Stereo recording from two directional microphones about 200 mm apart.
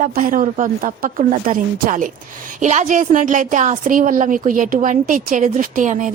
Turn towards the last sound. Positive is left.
turn(degrees=-40)  # may be behind; listen again after turning